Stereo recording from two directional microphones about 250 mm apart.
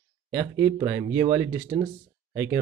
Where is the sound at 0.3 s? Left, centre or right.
Centre.